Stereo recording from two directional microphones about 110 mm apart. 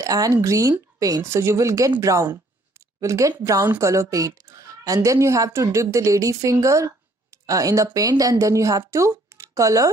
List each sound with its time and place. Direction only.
0.0 s a woman's voice: 30° right (ahead or behind)